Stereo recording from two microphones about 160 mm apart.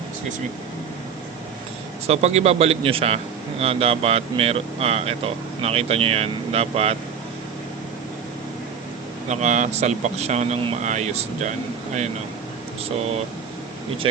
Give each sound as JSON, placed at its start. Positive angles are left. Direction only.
{"t": 2.0, "sound": "speech", "side_deg": -40}
{"t": 9.3, "sound": "speech", "side_deg": -45}